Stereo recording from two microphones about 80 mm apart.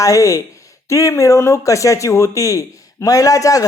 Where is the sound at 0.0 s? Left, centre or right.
Left.